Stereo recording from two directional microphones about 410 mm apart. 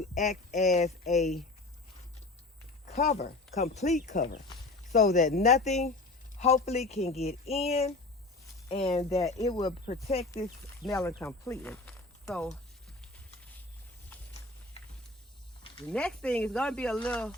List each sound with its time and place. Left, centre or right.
0.1 s speech: centre
2.8 s speech: centre
15.9 s speech: centre